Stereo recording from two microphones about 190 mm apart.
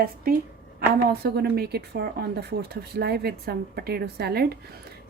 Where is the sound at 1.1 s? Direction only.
55° right (ahead or behind).